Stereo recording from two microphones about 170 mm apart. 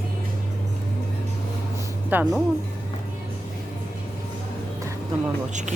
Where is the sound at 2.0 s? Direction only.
10° right (ahead or behind).